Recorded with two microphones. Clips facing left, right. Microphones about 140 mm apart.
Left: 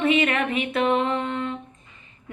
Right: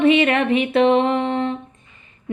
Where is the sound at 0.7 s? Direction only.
30° right (ahead or behind).